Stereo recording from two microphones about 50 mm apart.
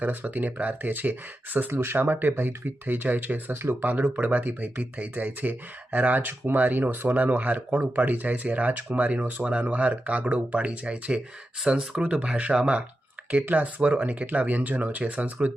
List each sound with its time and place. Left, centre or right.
0.0 s speech: right
1.7 s speech: right
4.2 s speech: right
13.4 s speech: right